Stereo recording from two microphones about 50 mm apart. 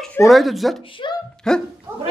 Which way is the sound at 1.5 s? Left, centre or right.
Centre.